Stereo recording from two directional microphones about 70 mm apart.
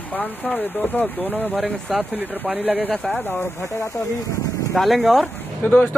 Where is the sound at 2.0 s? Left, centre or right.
Right.